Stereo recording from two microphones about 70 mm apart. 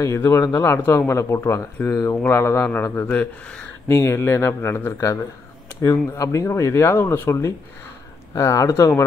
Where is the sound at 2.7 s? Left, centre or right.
Left.